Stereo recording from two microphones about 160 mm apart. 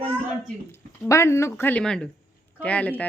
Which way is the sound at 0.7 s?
20° left (ahead or behind).